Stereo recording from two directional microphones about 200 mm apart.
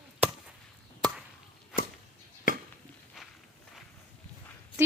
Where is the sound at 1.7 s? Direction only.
5° right (ahead or behind).